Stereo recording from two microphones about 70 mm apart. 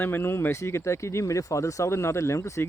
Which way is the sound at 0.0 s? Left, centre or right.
Left.